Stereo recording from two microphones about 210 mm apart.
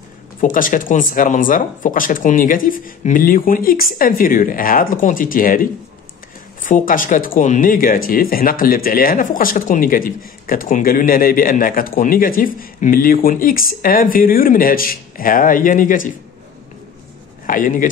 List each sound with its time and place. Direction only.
0.4 s speech: 40° left (ahead or behind)
17.5 s speech: 40° left (ahead or behind)